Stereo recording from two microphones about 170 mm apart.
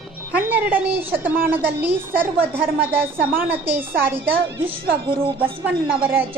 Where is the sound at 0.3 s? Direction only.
10° right (ahead or behind).